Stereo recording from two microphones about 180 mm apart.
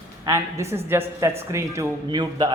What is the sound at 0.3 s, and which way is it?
A woman's voice, 15° right (ahead or behind).